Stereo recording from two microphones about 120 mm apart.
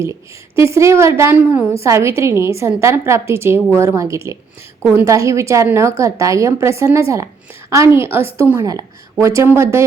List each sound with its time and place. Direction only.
0.0 s a woman's voice: 25° right (ahead or behind)